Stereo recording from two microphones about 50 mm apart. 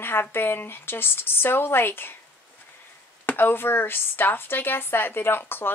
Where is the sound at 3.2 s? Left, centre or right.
Left.